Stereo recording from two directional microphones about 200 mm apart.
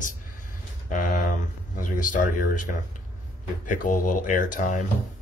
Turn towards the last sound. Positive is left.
turn(degrees=40)  # may be behind; listen again after turning